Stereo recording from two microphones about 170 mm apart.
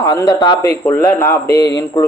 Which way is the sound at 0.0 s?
20° left (ahead or behind).